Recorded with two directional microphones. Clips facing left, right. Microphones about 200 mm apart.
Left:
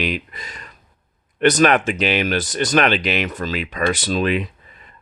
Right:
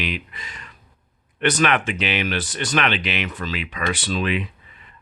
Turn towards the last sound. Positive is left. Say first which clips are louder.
# left 4 dB
turn(degrees=40)  # may be behind; listen again after turning